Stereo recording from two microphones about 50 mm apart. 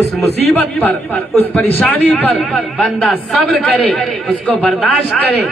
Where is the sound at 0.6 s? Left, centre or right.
Left.